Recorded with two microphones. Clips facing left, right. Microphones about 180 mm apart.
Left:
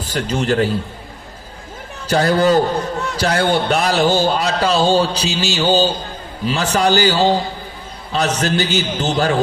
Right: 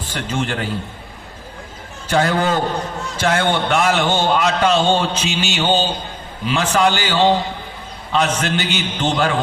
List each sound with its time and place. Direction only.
0.0 s a man's voice: 40° left (ahead or behind)
2.0 s a man's voice: 40° left (ahead or behind)